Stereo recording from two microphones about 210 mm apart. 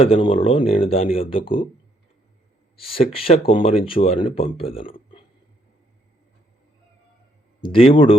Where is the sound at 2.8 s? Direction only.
25° left (ahead or behind).